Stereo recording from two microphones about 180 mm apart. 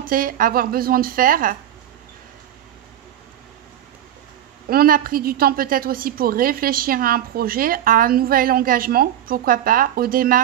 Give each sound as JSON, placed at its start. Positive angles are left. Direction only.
{"t": 0.0, "sound": "a woman's voice", "side_deg": -50}
{"t": 4.6, "sound": "a woman's voice", "side_deg": -55}